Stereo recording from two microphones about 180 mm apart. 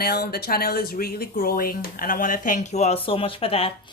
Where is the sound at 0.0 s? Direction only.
60° left (ahead or behind).